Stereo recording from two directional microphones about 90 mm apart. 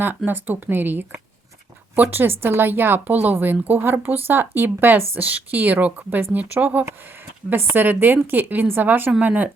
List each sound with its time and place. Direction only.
0.3 s speech: 20° right (ahead or behind)